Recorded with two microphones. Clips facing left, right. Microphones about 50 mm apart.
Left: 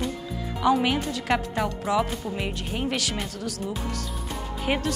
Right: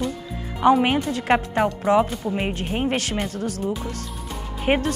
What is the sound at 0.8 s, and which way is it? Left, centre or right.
Speech, right.